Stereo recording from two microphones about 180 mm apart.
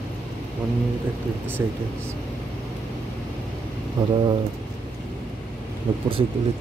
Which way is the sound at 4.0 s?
20° right (ahead or behind).